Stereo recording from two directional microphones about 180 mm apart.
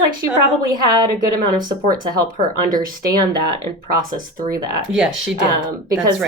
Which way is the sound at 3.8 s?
50° right (ahead or behind).